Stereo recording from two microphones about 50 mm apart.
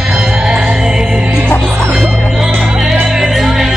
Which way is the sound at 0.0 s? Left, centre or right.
Centre.